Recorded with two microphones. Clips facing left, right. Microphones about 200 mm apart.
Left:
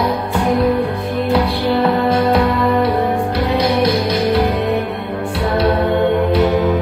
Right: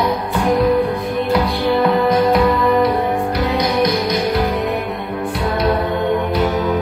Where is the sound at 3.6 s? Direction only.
30° left (ahead or behind).